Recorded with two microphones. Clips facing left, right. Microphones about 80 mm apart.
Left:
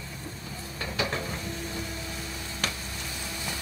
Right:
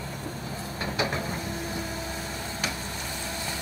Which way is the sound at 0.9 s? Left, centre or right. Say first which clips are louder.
Right 1 dB; right.